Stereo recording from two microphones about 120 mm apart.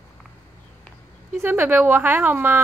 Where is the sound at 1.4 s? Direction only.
15° right (ahead or behind).